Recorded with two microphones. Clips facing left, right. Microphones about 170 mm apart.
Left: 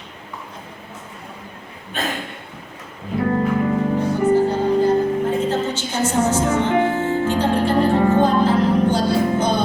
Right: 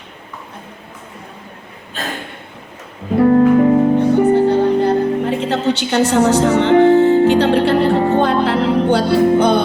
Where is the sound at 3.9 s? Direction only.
65° right (ahead or behind).